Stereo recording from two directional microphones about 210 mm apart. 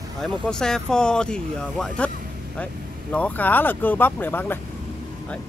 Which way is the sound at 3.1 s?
5° left (ahead or behind).